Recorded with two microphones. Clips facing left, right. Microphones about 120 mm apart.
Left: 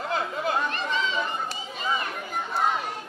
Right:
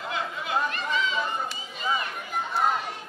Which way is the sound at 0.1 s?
40° left (ahead or behind).